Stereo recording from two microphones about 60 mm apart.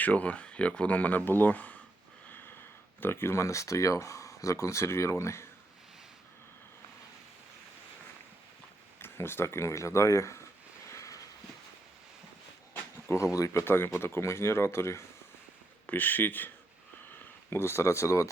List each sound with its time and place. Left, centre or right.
0.0 s speech: left
9.0 s speech: left
10.9 s vehicle: left
13.3 s speech: left
15.9 s speech: left
17.5 s speech: left